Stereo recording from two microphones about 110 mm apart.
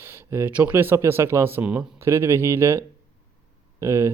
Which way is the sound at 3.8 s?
25° right (ahead or behind).